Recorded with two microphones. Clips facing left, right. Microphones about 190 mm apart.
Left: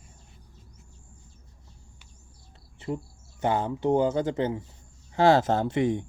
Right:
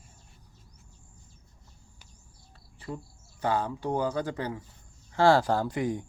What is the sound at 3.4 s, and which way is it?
Speech, 20° left (ahead or behind).